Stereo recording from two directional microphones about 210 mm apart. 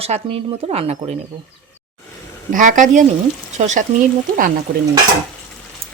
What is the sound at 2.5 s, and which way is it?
Speech, 35° right (ahead or behind).